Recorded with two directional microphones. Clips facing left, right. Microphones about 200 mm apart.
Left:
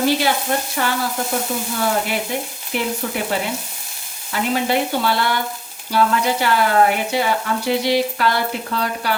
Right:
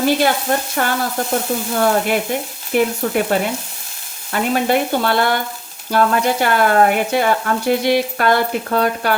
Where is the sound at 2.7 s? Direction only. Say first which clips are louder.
Right 6 dB; 50° right (ahead or behind).